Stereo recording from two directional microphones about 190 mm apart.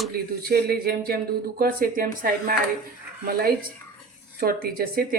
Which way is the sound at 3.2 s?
55° right (ahead or behind).